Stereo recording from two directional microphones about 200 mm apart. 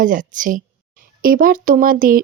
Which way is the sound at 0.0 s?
40° right (ahead or behind).